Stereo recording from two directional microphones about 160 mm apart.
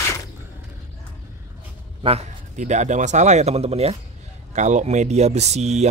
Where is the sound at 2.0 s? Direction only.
45° right (ahead or behind).